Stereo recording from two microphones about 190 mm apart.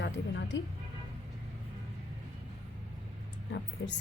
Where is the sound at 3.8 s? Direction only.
65° left (ahead or behind).